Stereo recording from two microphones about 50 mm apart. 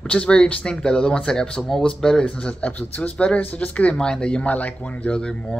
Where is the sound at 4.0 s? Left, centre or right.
Centre.